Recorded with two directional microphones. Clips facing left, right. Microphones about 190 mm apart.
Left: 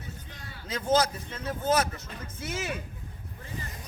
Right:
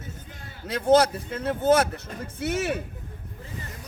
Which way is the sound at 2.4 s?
60° right (ahead or behind).